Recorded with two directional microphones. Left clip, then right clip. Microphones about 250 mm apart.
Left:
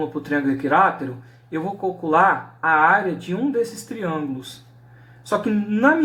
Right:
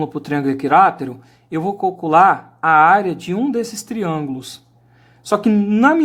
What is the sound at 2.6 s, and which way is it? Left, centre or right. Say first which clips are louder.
Speech: right 5 dB; right.